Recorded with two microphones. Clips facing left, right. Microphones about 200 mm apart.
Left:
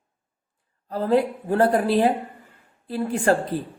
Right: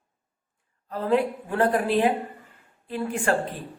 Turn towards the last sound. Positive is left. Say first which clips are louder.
# left 4 dB
turn(degrees=40)  # may be behind; listen again after turning